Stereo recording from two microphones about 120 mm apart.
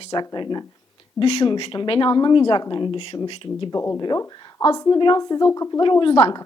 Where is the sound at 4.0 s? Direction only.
35° left (ahead or behind).